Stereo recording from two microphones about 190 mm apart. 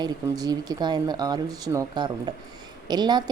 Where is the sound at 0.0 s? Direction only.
20° right (ahead or behind).